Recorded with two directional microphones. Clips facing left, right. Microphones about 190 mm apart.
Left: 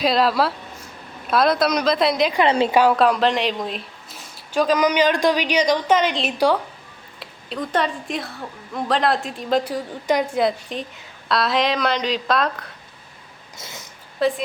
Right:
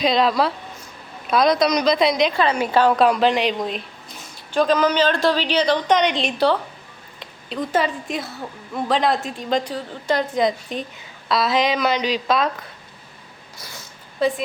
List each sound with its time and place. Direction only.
0.0 s a woman's voice: 5° left (ahead or behind)
2.3 s a woman's voice: 25° left (ahead or behind)
2.7 s speech: 5° left (ahead or behind)
7.2 s a woman's voice: centre (ahead or behind)
10.4 s a woman's voice: centre (ahead or behind)
13.6 s speech: 20° left (ahead or behind)
14.2 s a woman's voice: centre (ahead or behind)